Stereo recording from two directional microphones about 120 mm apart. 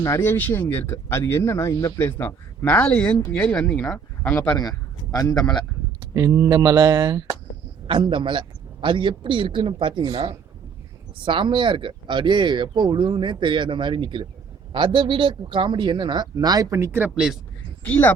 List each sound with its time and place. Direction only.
0.0 s speech: 25° left (ahead or behind)
4.5 s speech: 30° left (ahead or behind)
6.1 s speech: 30° right (ahead or behind)
7.9 s a man's voice: 45° right (ahead or behind)
16.7 s speech: 20° right (ahead or behind)
17.8 s speech: 15° left (ahead or behind)